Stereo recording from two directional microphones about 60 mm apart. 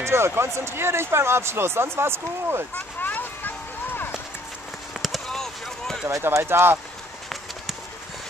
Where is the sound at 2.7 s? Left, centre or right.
Left.